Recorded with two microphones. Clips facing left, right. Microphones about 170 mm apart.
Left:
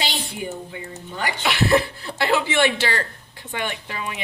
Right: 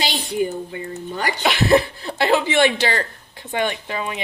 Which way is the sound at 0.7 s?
40° right (ahead or behind).